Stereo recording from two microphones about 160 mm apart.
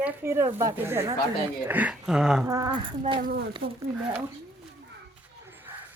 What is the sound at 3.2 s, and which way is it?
Speech, 65° right (ahead or behind).